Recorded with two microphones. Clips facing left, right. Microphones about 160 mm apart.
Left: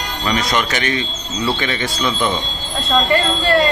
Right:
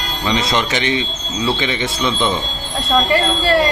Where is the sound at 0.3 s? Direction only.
25° right (ahead or behind).